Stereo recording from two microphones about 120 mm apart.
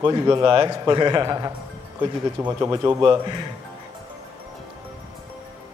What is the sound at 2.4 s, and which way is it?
Speech, 20° right (ahead or behind).